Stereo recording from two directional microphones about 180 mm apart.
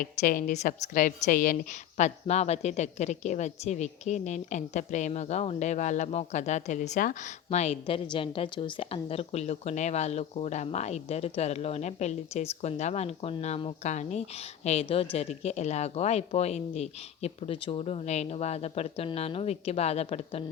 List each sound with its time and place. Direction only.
0.0 s a woman's voice: 50° left (ahead or behind)